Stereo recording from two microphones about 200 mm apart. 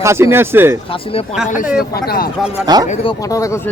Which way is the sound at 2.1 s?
50° left (ahead or behind).